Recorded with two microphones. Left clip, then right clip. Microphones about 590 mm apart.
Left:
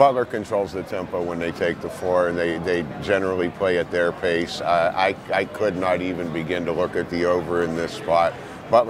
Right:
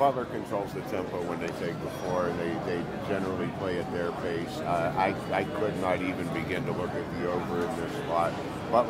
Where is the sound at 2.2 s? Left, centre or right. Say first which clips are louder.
Left 8 dB; left.